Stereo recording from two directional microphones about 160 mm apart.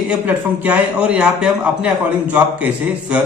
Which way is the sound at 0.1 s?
10° right (ahead or behind).